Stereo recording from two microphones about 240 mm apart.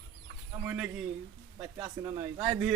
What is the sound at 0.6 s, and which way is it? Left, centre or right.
Speech, centre.